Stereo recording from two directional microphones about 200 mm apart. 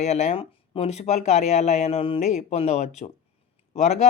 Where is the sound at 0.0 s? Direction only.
35° left (ahead or behind).